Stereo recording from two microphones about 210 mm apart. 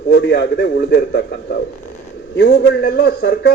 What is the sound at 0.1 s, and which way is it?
A man's voice, 55° left (ahead or behind).